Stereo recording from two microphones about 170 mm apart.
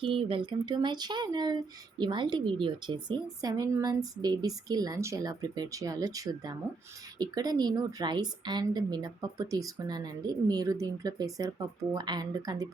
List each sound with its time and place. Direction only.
0.0 s speech: 30° right (ahead or behind)